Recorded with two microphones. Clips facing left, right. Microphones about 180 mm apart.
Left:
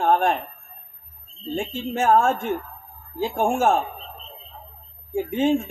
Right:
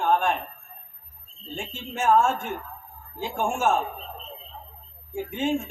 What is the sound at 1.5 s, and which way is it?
Speech, 35° left (ahead or behind).